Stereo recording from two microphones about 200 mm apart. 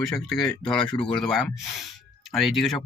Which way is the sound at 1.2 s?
Centre (ahead or behind).